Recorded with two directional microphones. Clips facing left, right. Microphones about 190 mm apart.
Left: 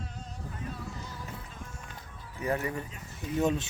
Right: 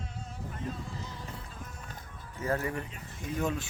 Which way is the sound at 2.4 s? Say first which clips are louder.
Even; 15° left (ahead or behind).